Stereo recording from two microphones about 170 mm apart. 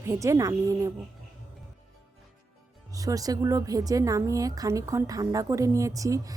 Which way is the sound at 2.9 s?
20° right (ahead or behind).